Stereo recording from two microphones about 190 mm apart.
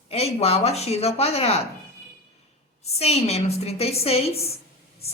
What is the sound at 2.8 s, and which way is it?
A woman's voice, 35° left (ahead or behind).